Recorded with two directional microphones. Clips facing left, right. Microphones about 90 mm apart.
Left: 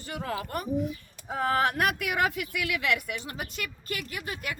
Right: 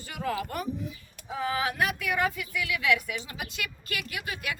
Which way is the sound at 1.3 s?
55° left (ahead or behind).